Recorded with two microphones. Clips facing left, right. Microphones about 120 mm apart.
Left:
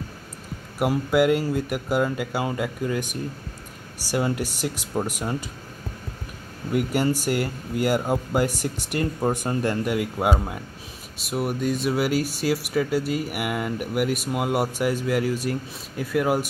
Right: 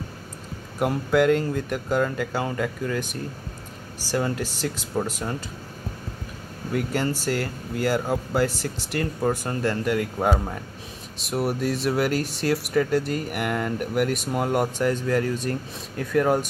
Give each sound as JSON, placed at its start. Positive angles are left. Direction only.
{"t": 0.7, "sound": "speech", "side_deg": 10}
{"t": 6.7, "sound": "speech", "side_deg": 15}